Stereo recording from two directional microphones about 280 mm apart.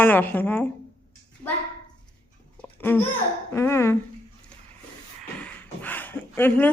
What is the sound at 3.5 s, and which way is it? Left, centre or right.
Speech, centre.